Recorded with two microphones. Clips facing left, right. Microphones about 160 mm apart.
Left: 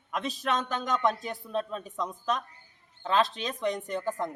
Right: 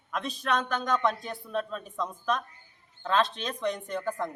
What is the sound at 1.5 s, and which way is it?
Speech, 20° left (ahead or behind).